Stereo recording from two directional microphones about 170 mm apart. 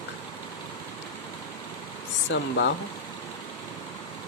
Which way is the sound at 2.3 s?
90° left.